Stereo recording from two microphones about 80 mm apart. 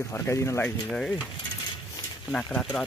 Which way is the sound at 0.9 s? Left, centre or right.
Centre.